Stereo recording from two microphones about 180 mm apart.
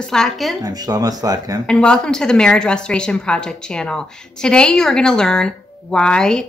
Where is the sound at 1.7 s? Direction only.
5° left (ahead or behind).